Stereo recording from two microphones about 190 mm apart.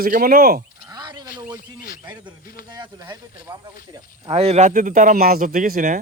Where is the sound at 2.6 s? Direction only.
25° right (ahead or behind).